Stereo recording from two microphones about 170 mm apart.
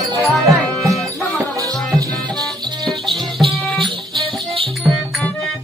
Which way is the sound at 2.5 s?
25° right (ahead or behind).